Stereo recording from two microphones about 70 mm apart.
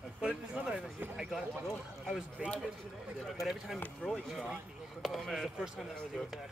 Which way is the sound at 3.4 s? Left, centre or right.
Centre.